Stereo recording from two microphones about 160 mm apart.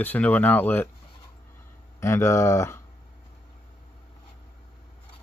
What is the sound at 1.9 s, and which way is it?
Speech, 15° left (ahead or behind).